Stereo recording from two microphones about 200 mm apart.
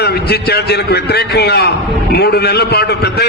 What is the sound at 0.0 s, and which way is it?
A man's voice, 55° left (ahead or behind).